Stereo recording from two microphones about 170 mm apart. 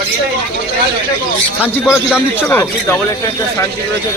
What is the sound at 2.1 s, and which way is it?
Speech, 15° left (ahead or behind).